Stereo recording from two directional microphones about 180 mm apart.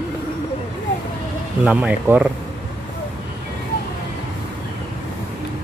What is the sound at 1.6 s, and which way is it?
Speech, 10° right (ahead or behind).